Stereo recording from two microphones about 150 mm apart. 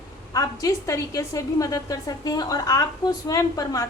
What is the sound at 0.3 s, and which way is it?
A woman's voice, 20° left (ahead or behind).